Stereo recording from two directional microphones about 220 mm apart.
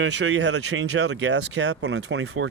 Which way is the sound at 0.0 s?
55° right (ahead or behind).